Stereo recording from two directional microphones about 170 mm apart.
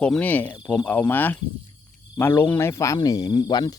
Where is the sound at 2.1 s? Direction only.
15° left (ahead or behind).